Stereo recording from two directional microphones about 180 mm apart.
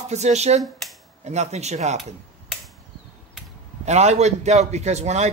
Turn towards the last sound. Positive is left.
turn(degrees=-40)  # may be behind; listen again after turning